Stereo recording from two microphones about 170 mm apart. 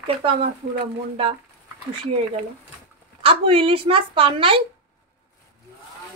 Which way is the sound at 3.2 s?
30° right (ahead or behind).